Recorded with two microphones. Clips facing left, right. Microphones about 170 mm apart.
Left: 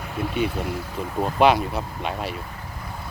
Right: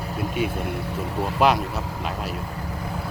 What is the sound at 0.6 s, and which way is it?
Speech, 55° right (ahead or behind).